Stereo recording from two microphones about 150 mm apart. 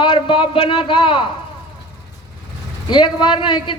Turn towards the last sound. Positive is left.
turn(degrees=35)  # may be behind; listen again after turning